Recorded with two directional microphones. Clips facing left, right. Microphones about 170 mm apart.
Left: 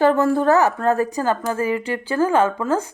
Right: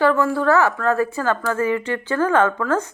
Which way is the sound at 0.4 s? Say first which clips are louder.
Even; 40° left (ahead or behind).